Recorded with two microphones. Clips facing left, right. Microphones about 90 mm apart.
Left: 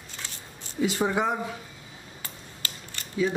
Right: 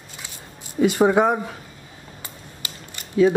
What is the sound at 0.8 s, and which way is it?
Speech, 60° right (ahead or behind).